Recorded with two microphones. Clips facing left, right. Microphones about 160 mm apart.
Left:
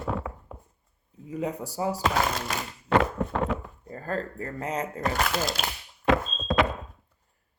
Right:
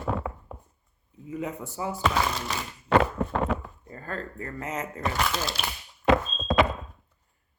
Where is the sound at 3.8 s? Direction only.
35° left (ahead or behind).